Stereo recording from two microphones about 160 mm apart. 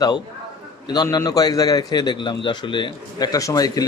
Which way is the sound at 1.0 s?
20° left (ahead or behind).